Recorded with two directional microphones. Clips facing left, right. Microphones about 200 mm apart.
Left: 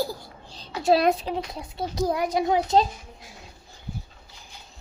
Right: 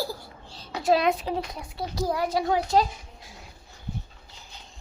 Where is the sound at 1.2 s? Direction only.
20° left (ahead or behind).